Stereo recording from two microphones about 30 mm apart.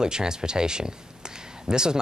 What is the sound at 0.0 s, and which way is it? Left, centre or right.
Speech, right.